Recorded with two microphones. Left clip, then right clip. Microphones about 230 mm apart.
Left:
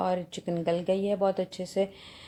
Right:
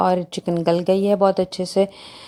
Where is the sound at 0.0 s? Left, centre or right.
Right.